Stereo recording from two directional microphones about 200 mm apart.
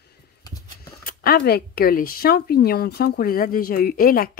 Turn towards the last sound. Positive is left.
turn(degrees=45)  # may be behind; listen again after turning